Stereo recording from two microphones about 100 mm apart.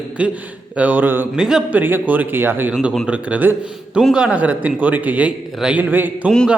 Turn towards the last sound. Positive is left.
turn(degrees=-20)  # may be behind; listen again after turning